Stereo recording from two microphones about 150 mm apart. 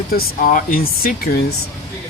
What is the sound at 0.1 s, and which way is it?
Speech, 80° left.